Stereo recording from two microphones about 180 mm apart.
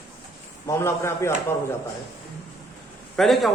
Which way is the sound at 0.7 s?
15° left (ahead or behind).